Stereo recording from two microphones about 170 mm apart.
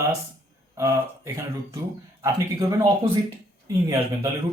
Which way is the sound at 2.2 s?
20° right (ahead or behind).